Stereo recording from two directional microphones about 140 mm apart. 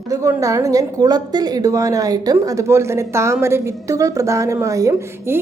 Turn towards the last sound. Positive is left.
turn(degrees=-20)  # may be behind; listen again after turning